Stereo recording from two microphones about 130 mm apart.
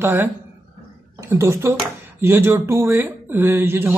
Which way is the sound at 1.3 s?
20° right (ahead or behind).